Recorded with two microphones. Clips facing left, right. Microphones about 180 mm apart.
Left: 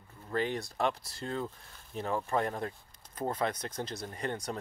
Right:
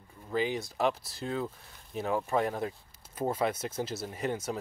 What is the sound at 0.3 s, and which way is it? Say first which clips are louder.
Speech: right 2 dB; centre (ahead or behind).